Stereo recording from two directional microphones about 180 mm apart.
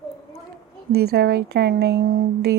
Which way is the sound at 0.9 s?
60° right (ahead or behind).